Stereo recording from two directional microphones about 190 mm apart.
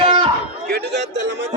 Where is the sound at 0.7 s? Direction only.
65° right (ahead or behind).